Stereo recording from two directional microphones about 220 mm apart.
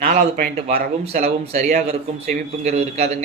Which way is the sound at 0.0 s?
35° right (ahead or behind).